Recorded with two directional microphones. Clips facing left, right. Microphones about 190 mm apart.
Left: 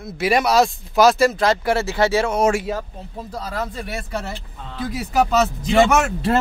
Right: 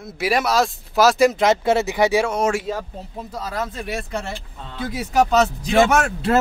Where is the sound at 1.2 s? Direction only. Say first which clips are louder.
Right 2 dB; 20° right (ahead or behind).